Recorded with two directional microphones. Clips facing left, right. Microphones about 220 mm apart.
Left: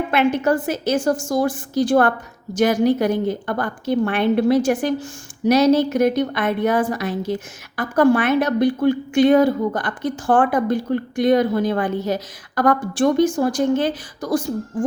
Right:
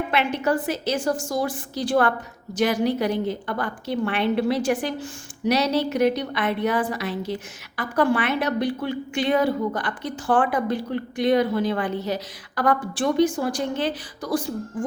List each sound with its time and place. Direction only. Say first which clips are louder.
0.1 s a woman's voice: left 6 dB; 45° left (ahead or behind)